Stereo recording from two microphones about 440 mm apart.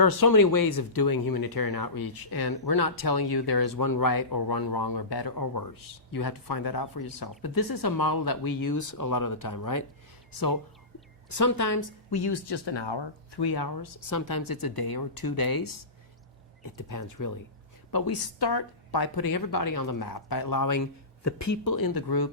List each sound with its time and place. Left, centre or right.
0.0 s a woman's voice: left
12.1 s speech: left